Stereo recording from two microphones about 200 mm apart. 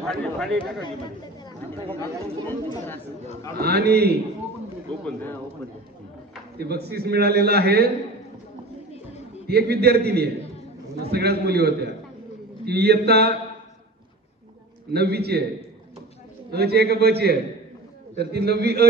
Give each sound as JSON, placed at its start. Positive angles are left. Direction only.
{"t": 0.0, "sound": "speech", "side_deg": 5}
{"t": 1.9, "sound": "speech", "side_deg": 10}
{"t": 3.5, "sound": "a man's voice", "side_deg": -50}
{"t": 5.0, "sound": "speech", "side_deg": 10}
{"t": 6.6, "sound": "a man's voice", "side_deg": -55}
{"t": 9.5, "sound": "a man's voice", "side_deg": -55}
{"t": 14.9, "sound": "a man's voice", "side_deg": -55}
{"t": 16.4, "sound": "a man's voice", "side_deg": -55}